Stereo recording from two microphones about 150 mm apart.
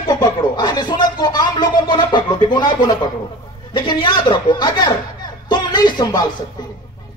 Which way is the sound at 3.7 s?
30° left (ahead or behind).